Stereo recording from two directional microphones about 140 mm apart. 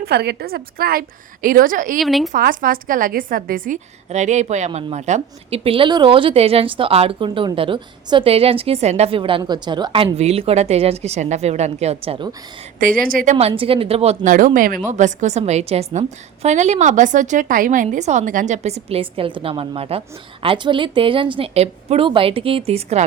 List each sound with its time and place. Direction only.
0.0 s a woman's voice: 90° right; by 2.0 s 75° right (ahead or behind)
2.0 s speech: centre (ahead or behind)
2.3 s a woman's voice: 75° right (ahead or behind); by 12.3 s 40° right (ahead or behind)
12.8 s a woman's voice: 85° right
13.6 s a woman's voice: 40° right (ahead or behind)
14.3 s a woman's voice: 70° right (ahead or behind)
14.8 s a woman's voice: 60° right (ahead or behind)
17.8 s a woman's voice: 55° right (ahead or behind)